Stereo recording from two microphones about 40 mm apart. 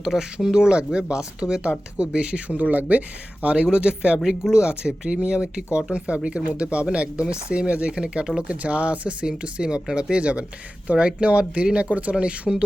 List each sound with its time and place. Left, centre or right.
0.1 s speech: centre; by 3.0 s right
3.4 s speech: right
4.3 s speech: centre